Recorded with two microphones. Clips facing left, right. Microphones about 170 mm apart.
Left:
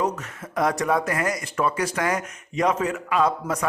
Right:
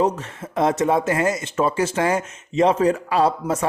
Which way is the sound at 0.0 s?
25° right (ahead or behind).